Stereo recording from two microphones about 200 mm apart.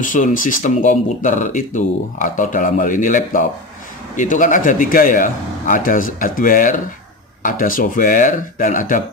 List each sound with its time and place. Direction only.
0.0 s a man's voice: 40° left (ahead or behind)